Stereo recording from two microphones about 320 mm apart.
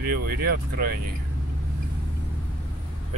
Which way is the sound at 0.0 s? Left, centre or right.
Right.